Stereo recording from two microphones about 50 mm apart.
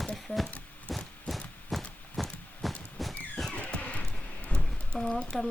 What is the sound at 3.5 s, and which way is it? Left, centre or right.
Music, left.